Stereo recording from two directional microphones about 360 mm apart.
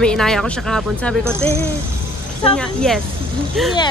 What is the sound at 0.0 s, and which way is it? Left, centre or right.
Speech, centre.